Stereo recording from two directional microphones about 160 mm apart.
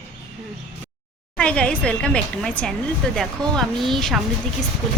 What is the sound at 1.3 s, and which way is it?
A woman's voice, 5° left (ahead or behind).